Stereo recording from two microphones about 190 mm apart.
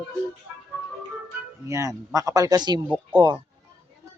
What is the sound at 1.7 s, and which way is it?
A man's voice, 15° right (ahead or behind).